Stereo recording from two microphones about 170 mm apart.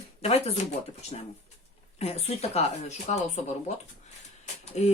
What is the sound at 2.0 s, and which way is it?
Speech, 40° left (ahead or behind).